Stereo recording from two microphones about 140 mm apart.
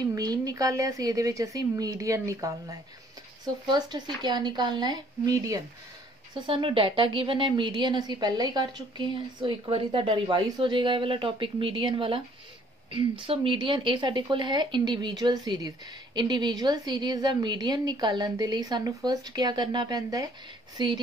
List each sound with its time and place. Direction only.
0.0 s a woman's voice: 25° right (ahead or behind)
6.4 s a woman's voice: 40° right (ahead or behind)